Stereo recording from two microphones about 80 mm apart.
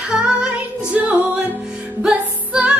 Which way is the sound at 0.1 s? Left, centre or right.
Centre.